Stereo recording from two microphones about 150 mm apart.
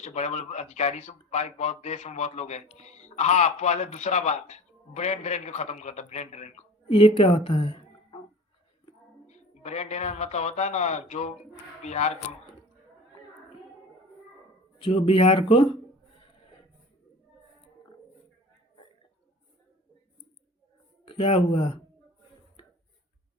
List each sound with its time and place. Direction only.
0.0 s a man's voice: 50° left (ahead or behind)
6.9 s a woman's voice: 35° left (ahead or behind)
9.2 s a man's voice: 50° left (ahead or behind)
14.8 s speech: 40° left (ahead or behind)
21.1 s speech: 40° left (ahead or behind)